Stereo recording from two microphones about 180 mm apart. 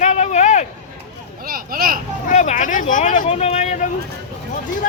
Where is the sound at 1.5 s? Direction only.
55° right (ahead or behind).